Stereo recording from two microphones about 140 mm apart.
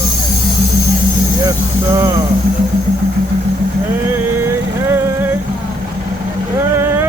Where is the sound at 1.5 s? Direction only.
20° right (ahead or behind).